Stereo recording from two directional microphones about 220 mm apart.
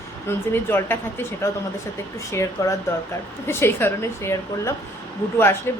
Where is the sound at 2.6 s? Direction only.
15° left (ahead or behind).